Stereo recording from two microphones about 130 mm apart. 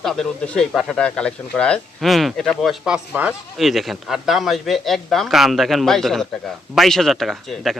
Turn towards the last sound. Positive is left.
turn(degrees=0)  # may be behind; listen again after turning